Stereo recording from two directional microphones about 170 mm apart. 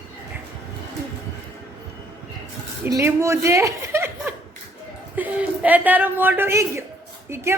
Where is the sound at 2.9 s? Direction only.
15° right (ahead or behind).